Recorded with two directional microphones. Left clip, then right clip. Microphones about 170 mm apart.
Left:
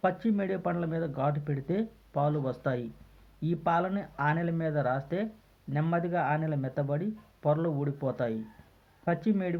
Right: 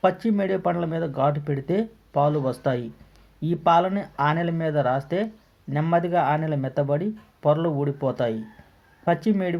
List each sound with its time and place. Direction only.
0.0 s speech: 15° right (ahead or behind)